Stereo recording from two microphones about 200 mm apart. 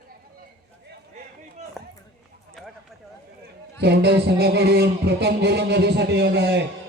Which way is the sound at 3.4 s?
55° right (ahead or behind).